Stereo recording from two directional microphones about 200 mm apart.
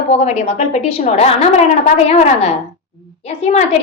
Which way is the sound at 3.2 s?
30° left (ahead or behind).